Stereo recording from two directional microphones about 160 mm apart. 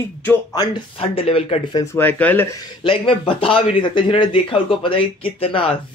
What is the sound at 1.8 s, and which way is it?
Speech, 15° left (ahead or behind).